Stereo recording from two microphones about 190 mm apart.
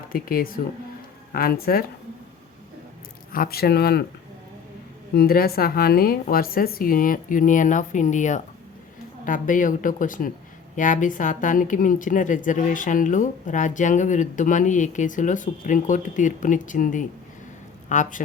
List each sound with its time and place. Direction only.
0.1 s speech: 50° left (ahead or behind)
3.3 s speech: 50° left (ahead or behind)
5.1 s speech: 50° left (ahead or behind)